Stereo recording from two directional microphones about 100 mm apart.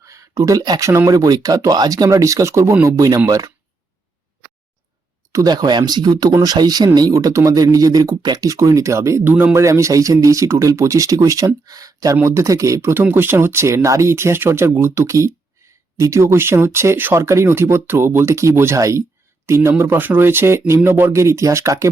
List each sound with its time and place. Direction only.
0.0 s a sound: 35° right (ahead or behind)
0.9 s speech: 30° right (ahead or behind)
5.3 s speech: 40° right (ahead or behind)